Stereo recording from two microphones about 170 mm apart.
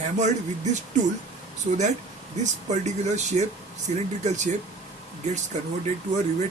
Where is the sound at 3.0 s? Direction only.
40° right (ahead or behind).